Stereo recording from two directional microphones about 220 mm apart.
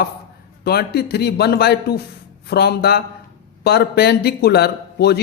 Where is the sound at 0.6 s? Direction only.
45° left (ahead or behind).